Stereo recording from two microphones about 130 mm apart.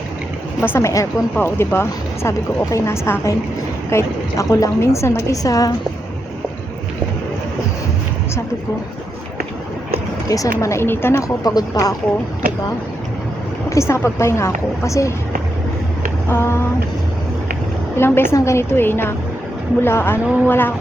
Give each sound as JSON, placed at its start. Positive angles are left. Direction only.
{"t": 0.7, "sound": "a woman's voice", "side_deg": 20}
{"t": 10.2, "sound": "a woman's voice", "side_deg": 25}
{"t": 11.4, "sound": "a woman's voice", "side_deg": 30}
{"t": 13.7, "sound": "a woman's voice", "side_deg": 20}
{"t": 16.3, "sound": "a woman's voice", "side_deg": 20}
{"t": 17.9, "sound": "a woman's voice", "side_deg": 20}